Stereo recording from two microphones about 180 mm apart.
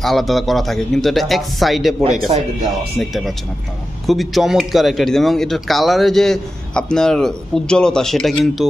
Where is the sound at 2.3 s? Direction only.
35° right (ahead or behind).